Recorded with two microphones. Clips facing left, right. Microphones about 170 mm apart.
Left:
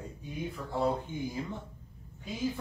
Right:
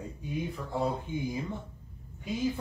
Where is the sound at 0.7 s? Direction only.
15° right (ahead or behind).